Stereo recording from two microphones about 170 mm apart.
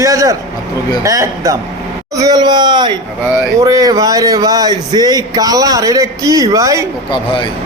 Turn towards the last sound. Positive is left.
turn(degrees=30)  # may be behind; listen again after turning